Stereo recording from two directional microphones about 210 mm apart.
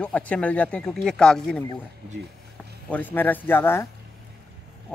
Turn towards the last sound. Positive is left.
turn(degrees=10)  # may be behind; listen again after turning